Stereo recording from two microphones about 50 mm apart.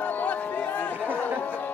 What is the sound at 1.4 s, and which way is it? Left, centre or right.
Music, left.